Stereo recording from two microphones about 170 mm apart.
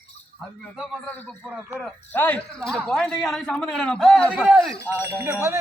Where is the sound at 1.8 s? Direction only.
5° left (ahead or behind).